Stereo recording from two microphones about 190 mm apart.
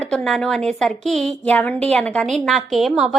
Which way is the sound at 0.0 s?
5° left (ahead or behind).